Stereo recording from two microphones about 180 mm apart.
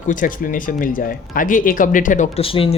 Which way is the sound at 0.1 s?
50° left (ahead or behind).